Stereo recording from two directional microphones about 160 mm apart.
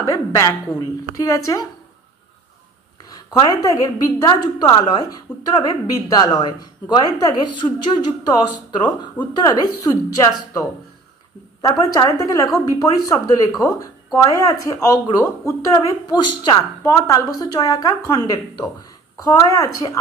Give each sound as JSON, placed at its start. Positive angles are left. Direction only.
{"t": 0.0, "sound": "speech", "side_deg": 20}
{"t": 3.3, "sound": "speech", "side_deg": 25}